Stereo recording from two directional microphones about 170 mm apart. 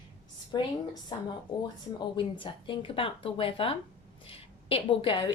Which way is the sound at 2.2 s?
30° left (ahead or behind).